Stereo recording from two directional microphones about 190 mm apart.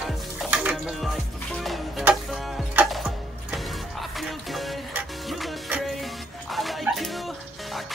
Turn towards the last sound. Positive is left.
turn(degrees=0)  # may be behind; listen again after turning